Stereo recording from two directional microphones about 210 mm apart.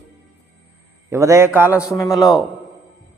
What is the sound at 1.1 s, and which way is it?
A man's voice, 15° right (ahead or behind).